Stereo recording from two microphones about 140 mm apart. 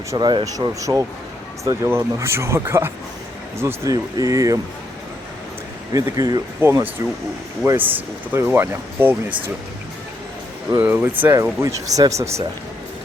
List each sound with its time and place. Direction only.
0.1 s speech: 30° right (ahead or behind)
5.9 s speech: 25° right (ahead or behind)
10.7 s speech: 15° right (ahead or behind)